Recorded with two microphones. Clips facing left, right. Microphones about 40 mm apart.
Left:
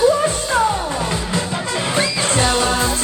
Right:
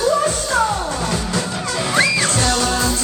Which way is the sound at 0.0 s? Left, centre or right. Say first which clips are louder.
Left 2 dB; left.